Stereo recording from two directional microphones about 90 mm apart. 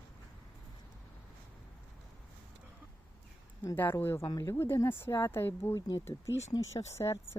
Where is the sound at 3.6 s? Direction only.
25° left (ahead or behind).